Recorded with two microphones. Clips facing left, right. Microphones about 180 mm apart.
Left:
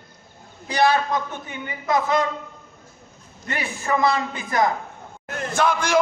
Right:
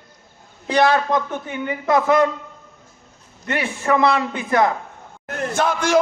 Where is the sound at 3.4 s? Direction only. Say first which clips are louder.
Right 6 dB; 65° right (ahead or behind).